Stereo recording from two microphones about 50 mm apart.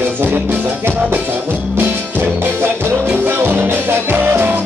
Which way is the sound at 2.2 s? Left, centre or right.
Right.